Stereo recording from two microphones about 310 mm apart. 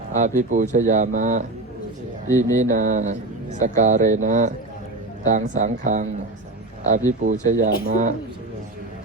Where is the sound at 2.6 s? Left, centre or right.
Right.